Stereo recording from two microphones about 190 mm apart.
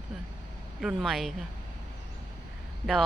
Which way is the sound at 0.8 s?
Centre (ahead or behind).